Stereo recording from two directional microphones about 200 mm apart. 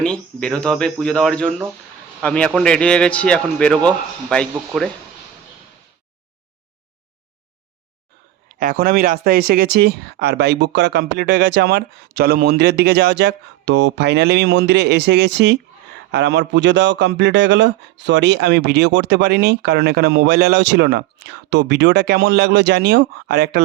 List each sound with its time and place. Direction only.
0.0 s speech: 5° left (ahead or behind)
8.5 s a man's voice: 45° right (ahead or behind)